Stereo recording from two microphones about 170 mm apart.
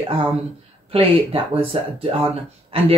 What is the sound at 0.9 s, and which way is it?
Speech, 35° right (ahead or behind).